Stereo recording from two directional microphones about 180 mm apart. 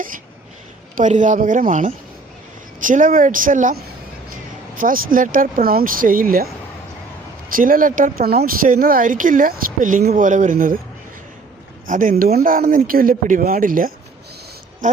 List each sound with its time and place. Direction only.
0.9 s speech: 45° right (ahead or behind)
4.8 s speech: 50° right (ahead or behind)
7.5 s speech: 50° right (ahead or behind)
11.9 s speech: 50° right (ahead or behind)